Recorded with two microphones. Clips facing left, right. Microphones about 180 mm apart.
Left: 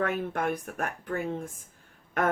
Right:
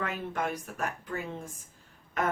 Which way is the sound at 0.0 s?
55° left (ahead or behind).